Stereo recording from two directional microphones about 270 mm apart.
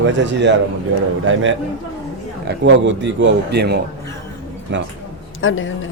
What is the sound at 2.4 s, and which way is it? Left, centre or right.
Speech, right.